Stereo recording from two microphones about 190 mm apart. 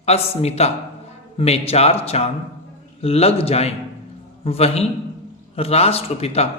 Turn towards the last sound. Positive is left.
turn(degrees=30)  # may be behind; listen again after turning